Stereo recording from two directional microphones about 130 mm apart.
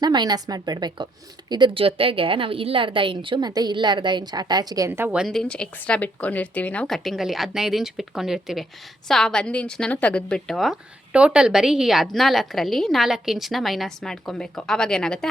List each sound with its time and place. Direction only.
0.0 s a woman's voice: 35° right (ahead or behind)
4.9 s a woman's voice: 15° right (ahead or behind)
5.2 s a woman's voice: 5° left (ahead or behind)